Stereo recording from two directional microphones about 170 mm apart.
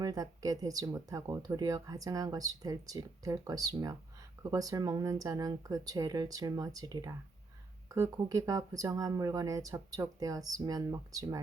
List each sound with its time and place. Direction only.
0.0 s speech: 20° right (ahead or behind)